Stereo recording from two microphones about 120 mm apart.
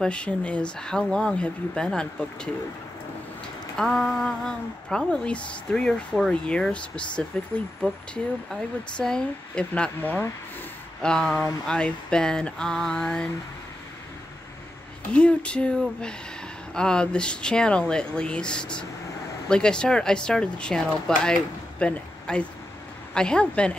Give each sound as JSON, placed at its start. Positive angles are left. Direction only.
{"t": 0.0, "sound": "speech", "side_deg": 10}
{"t": 3.7, "sound": "speech", "side_deg": 5}
{"t": 15.1, "sound": "speech", "side_deg": 10}